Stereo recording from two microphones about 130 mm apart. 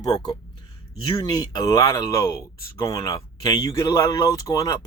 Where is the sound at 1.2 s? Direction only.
30° left (ahead or behind).